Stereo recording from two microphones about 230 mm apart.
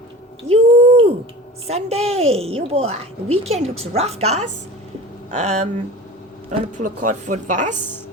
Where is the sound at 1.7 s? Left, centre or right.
Right.